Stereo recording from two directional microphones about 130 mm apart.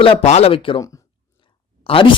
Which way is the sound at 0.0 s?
50° left (ahead or behind).